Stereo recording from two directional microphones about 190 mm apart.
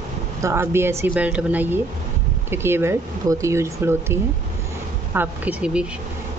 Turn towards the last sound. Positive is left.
turn(degrees=-5)  # may be behind; listen again after turning